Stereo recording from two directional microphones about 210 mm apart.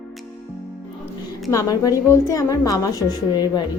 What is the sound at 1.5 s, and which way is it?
A woman's voice, 15° left (ahead or behind).